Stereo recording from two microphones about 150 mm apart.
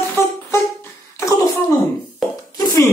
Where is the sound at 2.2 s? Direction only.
Centre (ahead or behind).